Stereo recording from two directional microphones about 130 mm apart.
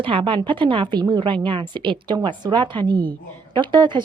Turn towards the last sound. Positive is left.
turn(degrees=-35)  # may be behind; listen again after turning